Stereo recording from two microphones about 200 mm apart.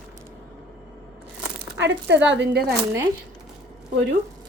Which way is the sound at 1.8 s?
60° right (ahead or behind).